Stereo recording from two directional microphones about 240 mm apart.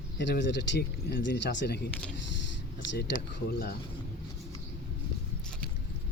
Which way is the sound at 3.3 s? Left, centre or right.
Left.